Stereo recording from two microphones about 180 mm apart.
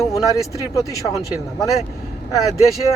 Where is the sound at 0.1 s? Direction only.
20° left (ahead or behind).